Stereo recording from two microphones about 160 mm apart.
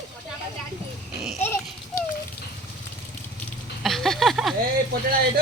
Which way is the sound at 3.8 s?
Centre (ahead or behind).